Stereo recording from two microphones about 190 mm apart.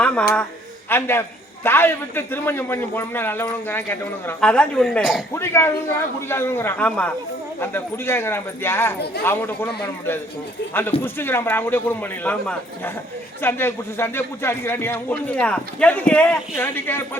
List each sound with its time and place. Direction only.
0.0 s a sound: 5° left (ahead or behind)
0.9 s a man's voice: 10° left (ahead or behind)
5.3 s a man's voice: 15° left (ahead or behind)
11.0 s a man's voice: 10° left (ahead or behind)